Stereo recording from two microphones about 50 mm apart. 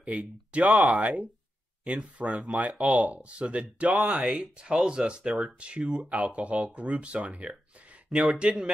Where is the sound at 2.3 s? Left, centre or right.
Centre.